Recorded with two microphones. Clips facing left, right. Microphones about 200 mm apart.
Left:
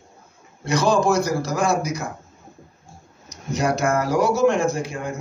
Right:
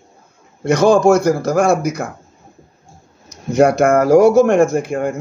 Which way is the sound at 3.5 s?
55° right (ahead or behind).